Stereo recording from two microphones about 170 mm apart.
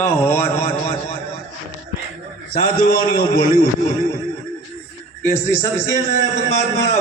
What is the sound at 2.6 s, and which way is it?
A man's voice, 60° left (ahead or behind).